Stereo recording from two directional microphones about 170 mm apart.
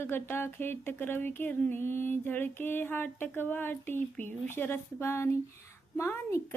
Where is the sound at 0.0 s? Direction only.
15° left (ahead or behind).